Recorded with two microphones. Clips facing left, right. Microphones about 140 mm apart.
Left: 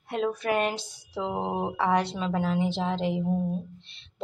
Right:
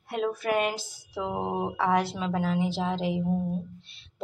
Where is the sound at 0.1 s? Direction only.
5° right (ahead or behind).